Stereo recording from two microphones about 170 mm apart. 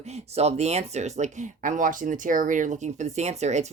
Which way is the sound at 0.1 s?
40° right (ahead or behind).